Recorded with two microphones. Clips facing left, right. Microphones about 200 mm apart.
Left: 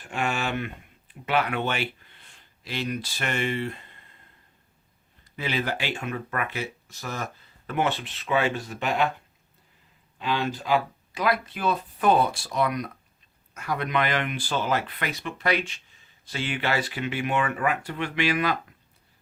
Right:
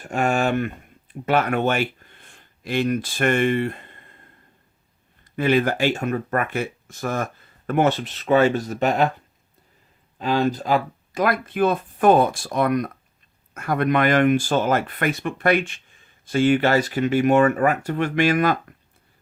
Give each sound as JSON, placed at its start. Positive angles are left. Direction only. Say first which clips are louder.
{"t": 0.0, "sound": "speech", "louder": "right 7 dB", "side_deg": -45}
{"t": 5.2, "sound": "speech", "louder": "right 10 dB", "side_deg": -50}
{"t": 10.2, "sound": "speech", "louder": "right 7 dB", "side_deg": -40}